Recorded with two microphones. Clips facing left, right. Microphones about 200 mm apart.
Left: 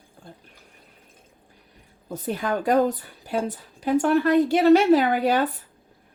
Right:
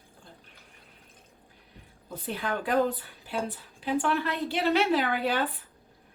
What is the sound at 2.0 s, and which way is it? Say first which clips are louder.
A woman's voice: left 6 dB; 45° left (ahead or behind).